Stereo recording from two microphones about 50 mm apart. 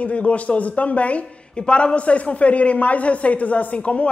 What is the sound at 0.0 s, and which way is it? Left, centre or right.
Speech, left.